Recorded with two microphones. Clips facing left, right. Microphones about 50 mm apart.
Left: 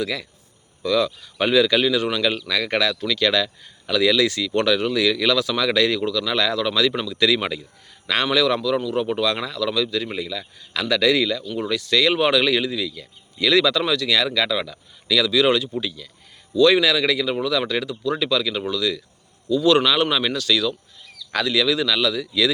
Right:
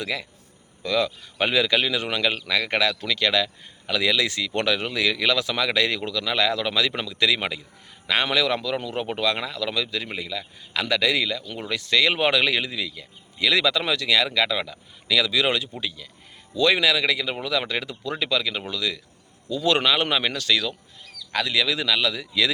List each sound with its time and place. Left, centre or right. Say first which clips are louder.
0.0 s speech: left 3 dB; centre
11.7 s speech: left 2 dB; right